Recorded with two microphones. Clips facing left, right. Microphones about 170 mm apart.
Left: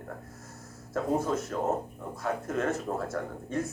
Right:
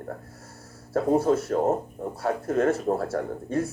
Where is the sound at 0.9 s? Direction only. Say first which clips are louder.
Right 7 dB; 35° right (ahead or behind).